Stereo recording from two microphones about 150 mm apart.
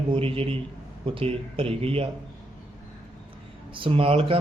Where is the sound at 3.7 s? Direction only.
35° right (ahead or behind).